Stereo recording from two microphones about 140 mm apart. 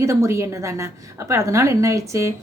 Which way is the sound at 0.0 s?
20° right (ahead or behind).